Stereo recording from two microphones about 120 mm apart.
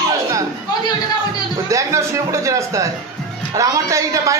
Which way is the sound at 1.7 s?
25° right (ahead or behind).